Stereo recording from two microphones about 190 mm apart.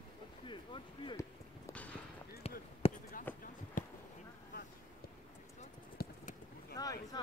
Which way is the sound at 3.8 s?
45° left (ahead or behind).